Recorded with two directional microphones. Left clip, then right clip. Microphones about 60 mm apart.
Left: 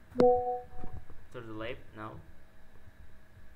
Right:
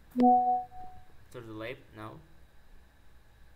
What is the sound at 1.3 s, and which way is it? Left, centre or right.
Speech, centre.